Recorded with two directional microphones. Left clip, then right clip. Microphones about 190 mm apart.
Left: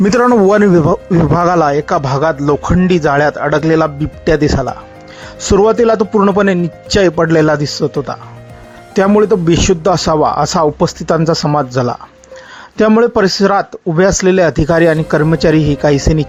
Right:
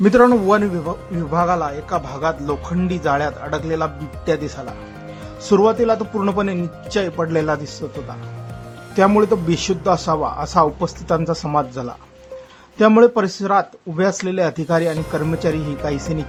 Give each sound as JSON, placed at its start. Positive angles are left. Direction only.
{"t": 0.0, "sound": "a man's voice", "side_deg": 45}
{"t": 9.0, "sound": "speech", "side_deg": 30}